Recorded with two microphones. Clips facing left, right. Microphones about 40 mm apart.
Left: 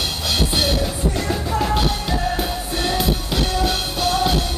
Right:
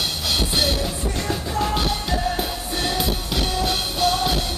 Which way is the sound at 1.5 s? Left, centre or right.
Centre.